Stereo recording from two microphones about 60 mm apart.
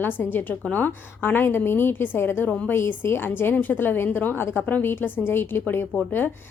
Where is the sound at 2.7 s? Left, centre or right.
Left.